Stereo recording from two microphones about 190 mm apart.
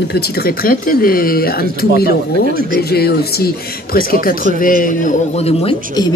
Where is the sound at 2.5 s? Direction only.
50° right (ahead or behind).